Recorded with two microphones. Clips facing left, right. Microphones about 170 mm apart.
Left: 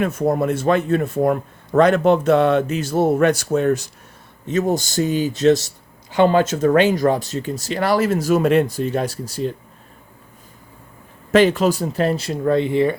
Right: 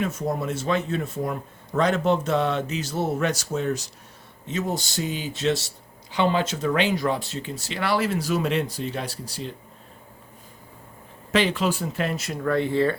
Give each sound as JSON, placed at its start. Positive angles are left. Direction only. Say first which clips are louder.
{"t": 0.0, "sound": "a man's voice", "louder": "left 8 dB", "side_deg": 60}
{"t": 11.3, "sound": "speech", "louder": "left 8 dB", "side_deg": 45}